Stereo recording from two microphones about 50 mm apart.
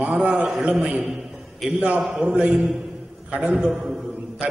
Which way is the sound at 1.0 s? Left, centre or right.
Centre.